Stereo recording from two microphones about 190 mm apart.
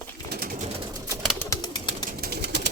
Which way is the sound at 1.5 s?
20° left (ahead or behind).